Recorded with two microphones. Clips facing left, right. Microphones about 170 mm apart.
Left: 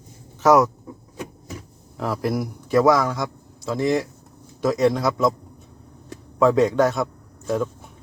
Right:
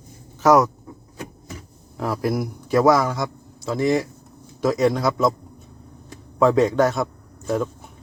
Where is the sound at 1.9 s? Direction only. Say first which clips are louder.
Right 1 dB; centre (ahead or behind).